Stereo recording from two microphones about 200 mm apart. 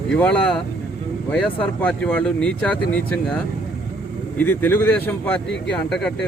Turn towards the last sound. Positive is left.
turn(degrees=5)  # may be behind; listen again after turning